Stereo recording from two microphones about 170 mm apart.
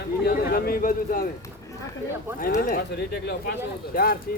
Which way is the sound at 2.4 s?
55° left (ahead or behind).